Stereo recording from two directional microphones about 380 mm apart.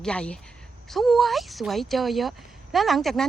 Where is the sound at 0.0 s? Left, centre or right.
Centre.